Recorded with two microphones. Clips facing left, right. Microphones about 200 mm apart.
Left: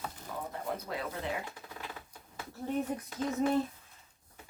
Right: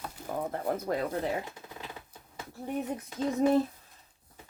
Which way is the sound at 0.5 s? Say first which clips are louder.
Right 6 dB; 50° right (ahead or behind).